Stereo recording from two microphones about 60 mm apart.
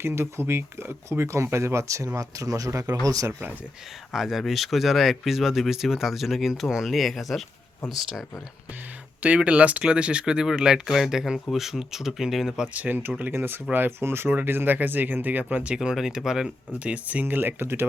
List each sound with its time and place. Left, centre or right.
0.0 s speech: right
2.1 s speech: right
2.8 s speech: right
4.1 s speech: centre
9.2 s speech: right; by 12.6 s centre
12.6 s speech: right
15.7 s speech: centre
16.8 s speech: right
17.2 s speech: right